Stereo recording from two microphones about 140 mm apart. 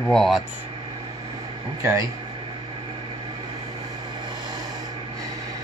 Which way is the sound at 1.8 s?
20° right (ahead or behind).